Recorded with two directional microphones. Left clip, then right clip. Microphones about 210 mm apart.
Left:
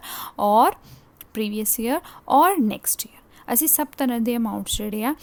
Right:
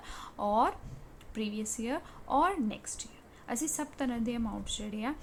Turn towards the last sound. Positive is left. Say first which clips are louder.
# left 11 dB
turn(degrees=55)  # may be behind; listen again after turning